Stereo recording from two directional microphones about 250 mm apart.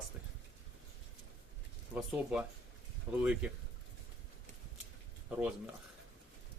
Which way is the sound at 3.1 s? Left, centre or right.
Centre.